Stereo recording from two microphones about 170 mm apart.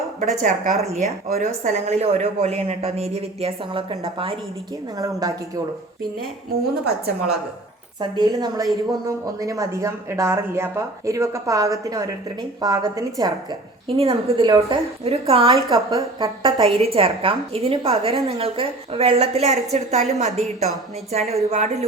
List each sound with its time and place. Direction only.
0.2 s a woman's voice: 45° right (ahead or behind)
4.9 s speech: 20° right (ahead or behind)
8.1 s speech: 25° right (ahead or behind)
13.8 s a woman's voice: 35° right (ahead or behind)
15.5 s a woman's voice: 20° right (ahead or behind); by 21.8 s 40° right (ahead or behind)